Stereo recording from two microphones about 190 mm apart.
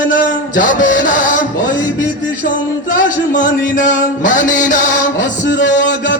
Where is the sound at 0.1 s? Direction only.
45° left (ahead or behind).